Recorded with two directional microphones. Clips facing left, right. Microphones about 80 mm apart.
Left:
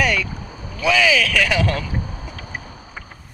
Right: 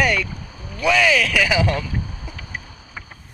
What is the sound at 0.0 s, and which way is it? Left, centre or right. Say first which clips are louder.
Boat: even; centre.